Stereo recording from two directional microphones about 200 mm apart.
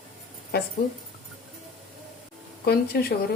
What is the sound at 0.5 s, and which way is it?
Speech, 50° left (ahead or behind).